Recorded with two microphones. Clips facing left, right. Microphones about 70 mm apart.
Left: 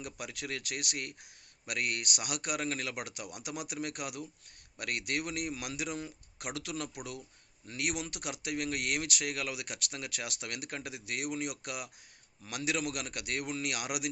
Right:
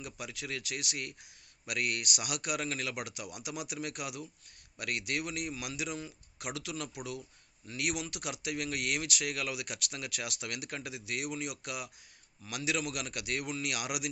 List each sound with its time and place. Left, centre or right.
0.0 s a man's voice: left
1.6 s a man's voice: left